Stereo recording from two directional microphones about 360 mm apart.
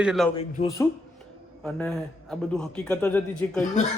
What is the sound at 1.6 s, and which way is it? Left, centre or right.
A man's voice, centre.